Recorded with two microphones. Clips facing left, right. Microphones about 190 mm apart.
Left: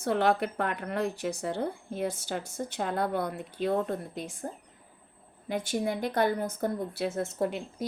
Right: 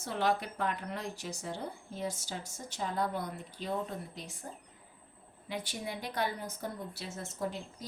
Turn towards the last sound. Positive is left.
turn(degrees=65)  # may be behind; listen again after turning